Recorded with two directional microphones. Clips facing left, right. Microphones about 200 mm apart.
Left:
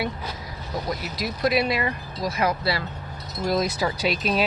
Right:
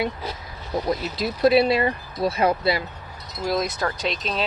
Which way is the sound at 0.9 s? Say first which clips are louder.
Right 5 dB; 25° right (ahead or behind).